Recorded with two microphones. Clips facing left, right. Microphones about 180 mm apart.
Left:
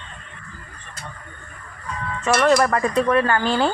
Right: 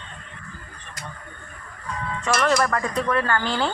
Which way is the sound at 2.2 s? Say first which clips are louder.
Left 4 dB; 20° left (ahead or behind).